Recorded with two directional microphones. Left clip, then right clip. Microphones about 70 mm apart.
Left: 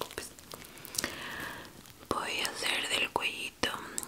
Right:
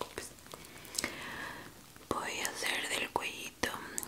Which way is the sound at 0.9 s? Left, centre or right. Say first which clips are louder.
Left 2 dB; centre.